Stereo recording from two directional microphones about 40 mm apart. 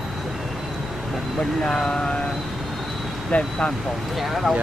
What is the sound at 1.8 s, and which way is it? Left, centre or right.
Speech, left.